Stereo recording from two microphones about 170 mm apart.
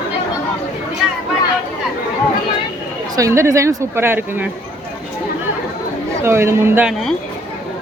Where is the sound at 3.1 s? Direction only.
15° right (ahead or behind).